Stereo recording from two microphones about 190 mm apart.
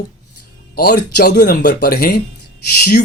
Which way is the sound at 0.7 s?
55° left (ahead or behind).